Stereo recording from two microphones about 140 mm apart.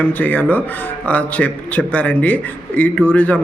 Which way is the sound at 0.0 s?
10° left (ahead or behind).